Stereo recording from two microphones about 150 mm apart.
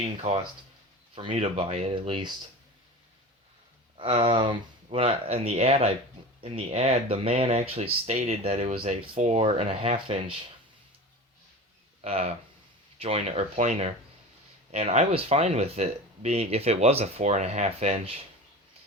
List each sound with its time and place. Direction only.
0.0 s speech: 45° right (ahead or behind)
3.9 s speech: 35° right (ahead or behind)
9.1 s speech: 50° right (ahead or behind)
12.0 s speech: 45° right (ahead or behind)